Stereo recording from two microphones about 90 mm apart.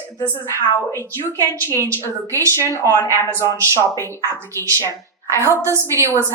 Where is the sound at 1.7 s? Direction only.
30° left (ahead or behind).